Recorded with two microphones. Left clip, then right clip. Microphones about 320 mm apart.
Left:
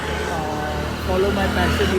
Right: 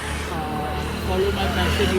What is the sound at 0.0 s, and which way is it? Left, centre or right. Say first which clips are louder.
Music: left 4 dB; left.